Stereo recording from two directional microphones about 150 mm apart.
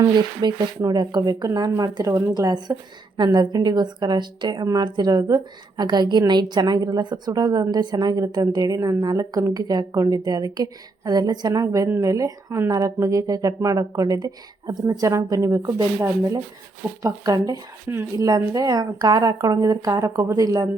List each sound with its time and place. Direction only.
0.0 s a woman's voice: 30° right (ahead or behind)